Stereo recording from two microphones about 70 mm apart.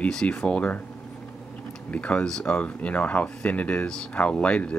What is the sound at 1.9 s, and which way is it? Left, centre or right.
Speech, centre.